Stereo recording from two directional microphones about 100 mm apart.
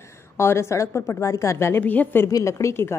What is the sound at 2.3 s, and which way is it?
Speech, 30° left (ahead or behind).